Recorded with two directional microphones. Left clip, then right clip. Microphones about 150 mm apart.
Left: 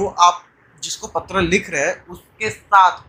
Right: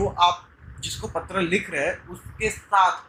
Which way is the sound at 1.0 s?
30° left (ahead or behind).